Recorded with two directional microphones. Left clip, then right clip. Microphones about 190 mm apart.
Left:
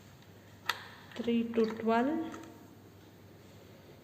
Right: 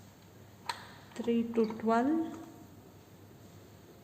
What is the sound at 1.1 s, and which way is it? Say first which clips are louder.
Speech: right 1 dB; 50° right (ahead or behind).